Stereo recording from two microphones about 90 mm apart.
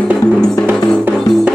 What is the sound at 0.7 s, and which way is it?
Music, 20° right (ahead or behind).